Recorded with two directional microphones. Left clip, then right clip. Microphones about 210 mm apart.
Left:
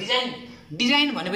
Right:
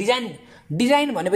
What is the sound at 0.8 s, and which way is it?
Speech, 35° right (ahead or behind).